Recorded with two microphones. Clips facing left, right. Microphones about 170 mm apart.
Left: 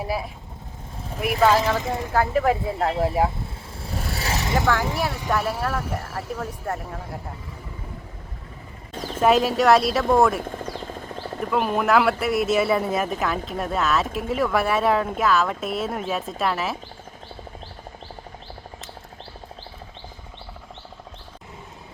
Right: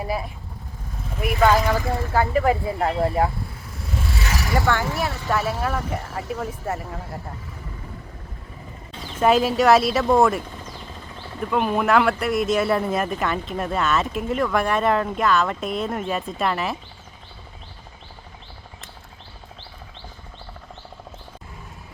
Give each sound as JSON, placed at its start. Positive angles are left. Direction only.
{"t": 0.0, "sound": "speech", "side_deg": 0}
{"t": 1.8, "sound": "speech", "side_deg": 20}
{"t": 2.1, "sound": "speech", "side_deg": 0}
{"t": 3.8, "sound": "vehicle", "side_deg": 35}
{"t": 4.5, "sound": "speech", "side_deg": 0}
{"t": 8.9, "sound": "vehicle", "side_deg": 40}
{"t": 9.2, "sound": "speech", "side_deg": 0}
{"t": 10.4, "sound": "helicopter", "side_deg": 55}
{"t": 11.3, "sound": "speech", "side_deg": 0}